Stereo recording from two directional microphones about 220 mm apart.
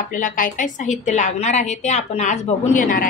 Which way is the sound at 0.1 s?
35° left (ahead or behind).